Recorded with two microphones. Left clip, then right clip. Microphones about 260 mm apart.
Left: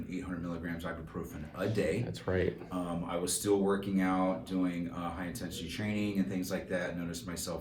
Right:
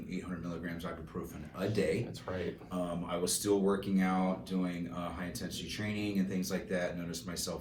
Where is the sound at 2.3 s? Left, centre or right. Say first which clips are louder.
Left 7 dB; left.